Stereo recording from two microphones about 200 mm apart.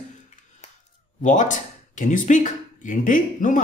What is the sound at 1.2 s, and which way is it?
Speech, 40° left (ahead or behind).